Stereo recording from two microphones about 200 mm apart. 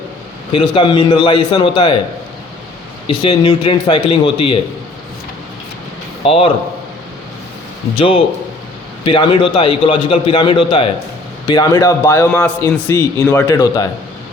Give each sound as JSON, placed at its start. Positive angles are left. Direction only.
{"t": 0.5, "sound": "a man's voice", "side_deg": 25}
{"t": 3.1, "sound": "a man's voice", "side_deg": 25}
{"t": 6.2, "sound": "a man's voice", "side_deg": 30}
{"t": 7.9, "sound": "a man's voice", "side_deg": 25}